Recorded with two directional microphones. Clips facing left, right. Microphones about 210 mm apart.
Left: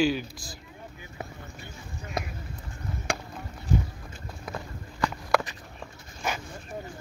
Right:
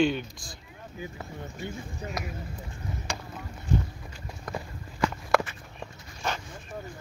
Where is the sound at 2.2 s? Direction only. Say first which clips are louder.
Left 5 dB; 25° left (ahead or behind).